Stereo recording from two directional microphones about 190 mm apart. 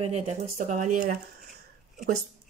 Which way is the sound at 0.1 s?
40° right (ahead or behind).